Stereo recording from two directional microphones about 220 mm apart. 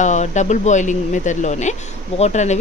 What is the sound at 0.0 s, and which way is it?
Speech, 35° left (ahead or behind).